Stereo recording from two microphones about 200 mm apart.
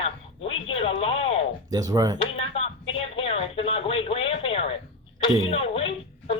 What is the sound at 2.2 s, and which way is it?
A woman's voice, 30° left (ahead or behind).